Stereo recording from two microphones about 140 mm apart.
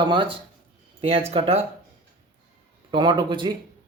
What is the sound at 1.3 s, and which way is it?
Speech, 50° right (ahead or behind).